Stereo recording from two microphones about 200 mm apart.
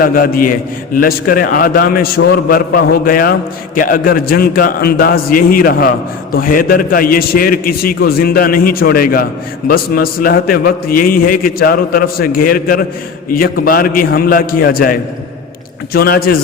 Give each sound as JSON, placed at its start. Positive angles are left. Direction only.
{"t": 0.0, "sound": "a man's voice", "side_deg": 45}